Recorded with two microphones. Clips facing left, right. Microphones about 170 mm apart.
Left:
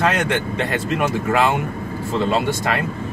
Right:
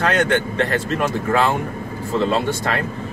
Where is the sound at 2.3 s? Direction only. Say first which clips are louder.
Even; 10° left (ahead or behind).